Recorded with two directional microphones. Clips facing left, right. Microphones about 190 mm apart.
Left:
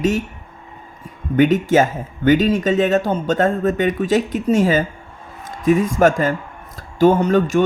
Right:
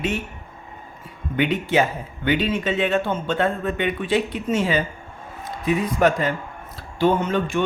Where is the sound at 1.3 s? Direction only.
45° left (ahead or behind).